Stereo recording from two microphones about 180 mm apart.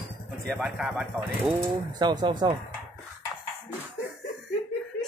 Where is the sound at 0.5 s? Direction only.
Centre (ahead or behind).